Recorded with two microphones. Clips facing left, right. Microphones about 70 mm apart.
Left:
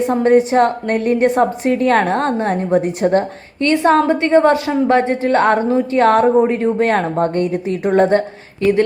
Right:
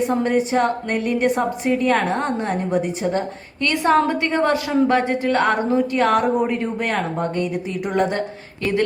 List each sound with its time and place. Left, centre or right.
0.1 s a woman's voice: left
1.1 s a woman's voice: left
3.0 s a woman's voice: left
3.6 s speech: left
7.2 s a woman's voice: left